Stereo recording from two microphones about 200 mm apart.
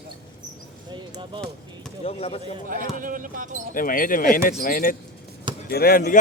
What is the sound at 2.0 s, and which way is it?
Speech, 30° left (ahead or behind).